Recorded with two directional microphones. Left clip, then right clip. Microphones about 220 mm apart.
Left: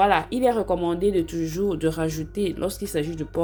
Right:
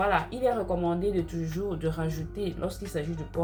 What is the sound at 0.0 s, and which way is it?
Speech, 55° left (ahead or behind).